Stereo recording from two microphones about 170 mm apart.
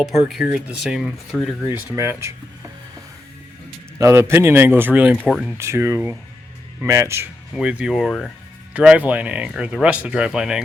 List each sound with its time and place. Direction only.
0.0 s speech: centre (ahead or behind)
1.7 s a man's voice: 10° right (ahead or behind)
3.9 s a man's voice: 15° right (ahead or behind)
5.1 s speech: 5° left (ahead or behind)
5.4 s a man's voice: 10° right (ahead or behind)